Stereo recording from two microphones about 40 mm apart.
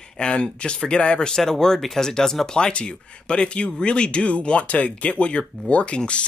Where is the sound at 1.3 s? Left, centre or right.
Centre.